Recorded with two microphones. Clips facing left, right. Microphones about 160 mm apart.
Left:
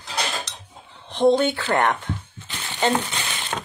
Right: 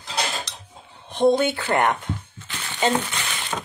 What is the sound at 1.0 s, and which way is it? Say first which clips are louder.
Speech: left 1 dB; 15° right (ahead or behind).